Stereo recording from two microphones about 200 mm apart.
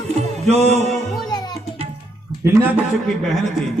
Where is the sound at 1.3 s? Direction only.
20° left (ahead or behind).